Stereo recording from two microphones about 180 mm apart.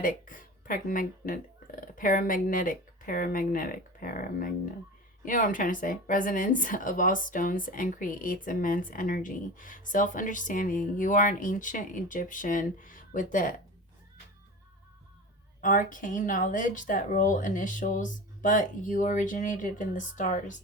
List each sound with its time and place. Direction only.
0.0 s a woman's voice: 50° left (ahead or behind)
15.6 s a woman's voice: 50° left (ahead or behind)